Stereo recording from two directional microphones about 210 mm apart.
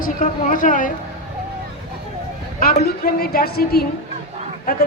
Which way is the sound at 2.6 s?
45° left (ahead or behind).